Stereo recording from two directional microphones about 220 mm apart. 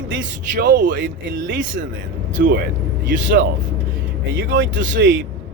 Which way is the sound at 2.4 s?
40° right (ahead or behind).